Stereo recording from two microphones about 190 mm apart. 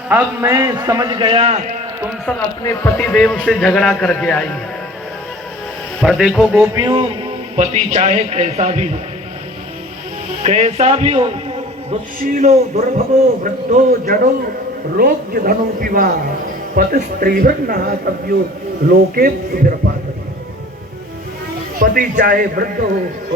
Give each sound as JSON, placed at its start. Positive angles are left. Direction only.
{"t": 0.1, "sound": "a man's voice", "side_deg": -10}
{"t": 1.4, "sound": "a man's voice", "side_deg": -35}
{"t": 2.6, "sound": "a man's voice", "side_deg": 10}
{"t": 6.0, "sound": "a man's voice", "side_deg": 0}
{"t": 6.6, "sound": "speech", "side_deg": -20}
{"t": 7.5, "sound": "a man's voice", "side_deg": -35}
{"t": 10.4, "sound": "a man's voice", "side_deg": -35}
{"t": 12.2, "sound": "a man's voice", "side_deg": -40}
{"t": 13.4, "sound": "a man's voice", "side_deg": -45}
{"t": 21.8, "sound": "a man's voice", "side_deg": -45}